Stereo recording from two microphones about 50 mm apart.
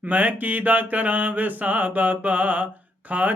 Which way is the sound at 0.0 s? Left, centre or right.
Right.